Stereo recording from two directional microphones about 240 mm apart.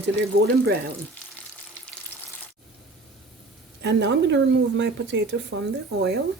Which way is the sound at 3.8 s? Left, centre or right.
Right.